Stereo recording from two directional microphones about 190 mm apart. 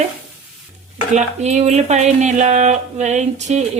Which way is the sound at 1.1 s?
35° right (ahead or behind).